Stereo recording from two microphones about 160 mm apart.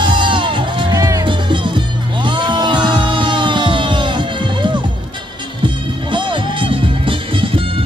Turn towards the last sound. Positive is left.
turn(degrees=-35)  # may be behind; listen again after turning